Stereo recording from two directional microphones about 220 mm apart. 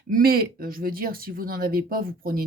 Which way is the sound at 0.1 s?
45° right (ahead or behind).